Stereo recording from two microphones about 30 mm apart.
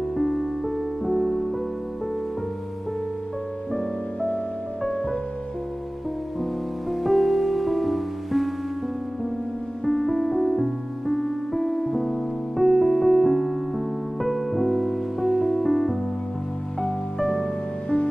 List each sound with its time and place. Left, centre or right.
0.2 s music: centre
4.9 s music: left
6.9 s music: centre
9.8 s music: centre
17.2 s music: centre